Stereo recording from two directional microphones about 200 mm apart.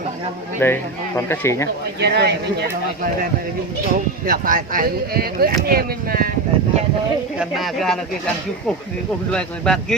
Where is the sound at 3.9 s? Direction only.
45° right (ahead or behind).